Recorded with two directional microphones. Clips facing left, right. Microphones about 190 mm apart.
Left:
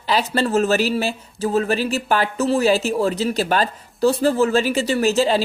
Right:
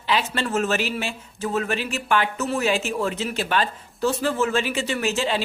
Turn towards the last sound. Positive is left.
turn(degrees=35)  # may be behind; listen again after turning